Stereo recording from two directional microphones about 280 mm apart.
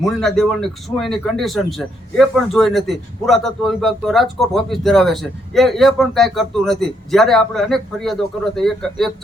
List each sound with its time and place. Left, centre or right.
0.0 s speech: centre